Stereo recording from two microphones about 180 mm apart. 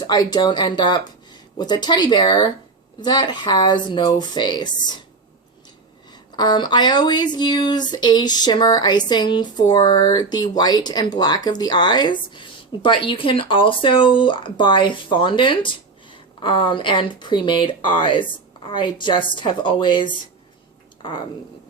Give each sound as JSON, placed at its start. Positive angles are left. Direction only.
{"t": 0.1, "sound": "speech", "side_deg": 25}
{"t": 6.1, "sound": "speech", "side_deg": 25}